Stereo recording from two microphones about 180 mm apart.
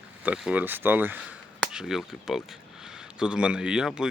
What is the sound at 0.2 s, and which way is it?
Speech, 5° right (ahead or behind).